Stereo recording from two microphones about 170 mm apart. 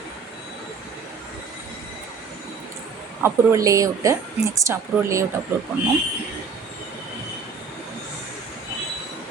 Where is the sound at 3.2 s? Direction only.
20° right (ahead or behind).